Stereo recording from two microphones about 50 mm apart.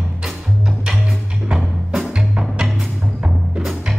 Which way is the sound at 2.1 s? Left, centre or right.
Centre.